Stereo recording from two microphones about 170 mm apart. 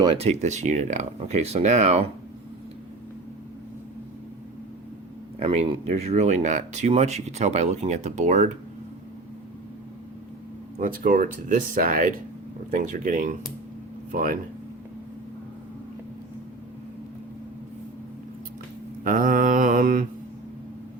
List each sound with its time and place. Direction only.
0.2 s speech: 40° right (ahead or behind)
5.4 s speech: 35° right (ahead or behind)
10.8 s speech: 50° right (ahead or behind)
19.0 s mantra: 55° right (ahead or behind)